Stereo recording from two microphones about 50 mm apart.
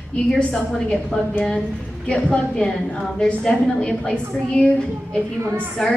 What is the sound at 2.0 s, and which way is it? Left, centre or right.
A woman's voice, centre.